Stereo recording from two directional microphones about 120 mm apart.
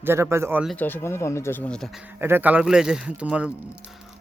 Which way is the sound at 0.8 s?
20° left (ahead or behind).